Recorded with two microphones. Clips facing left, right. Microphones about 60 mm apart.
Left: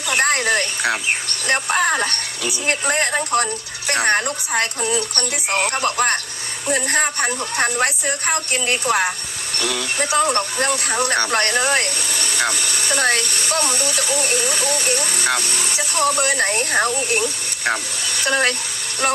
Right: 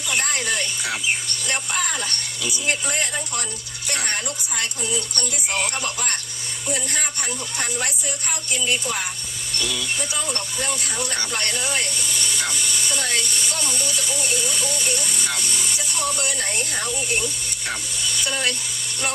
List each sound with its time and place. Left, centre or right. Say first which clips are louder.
0.1 s speech: left 7 dB; left